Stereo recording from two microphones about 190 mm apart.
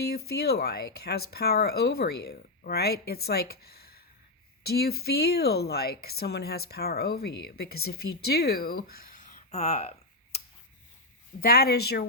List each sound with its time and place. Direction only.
0.0 s speech: 55° left (ahead or behind); by 9.9 s 35° left (ahead or behind)
11.3 s speech: 50° left (ahead or behind)